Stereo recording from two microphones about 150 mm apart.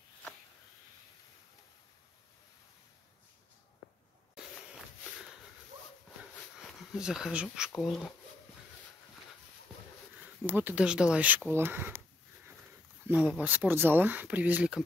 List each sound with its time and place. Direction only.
6.6 s speech: 5° right (ahead or behind)
10.4 s speech: 10° right (ahead or behind)
13.1 s speech: 5° right (ahead or behind)